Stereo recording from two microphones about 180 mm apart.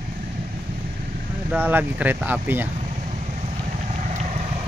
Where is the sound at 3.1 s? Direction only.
40° right (ahead or behind).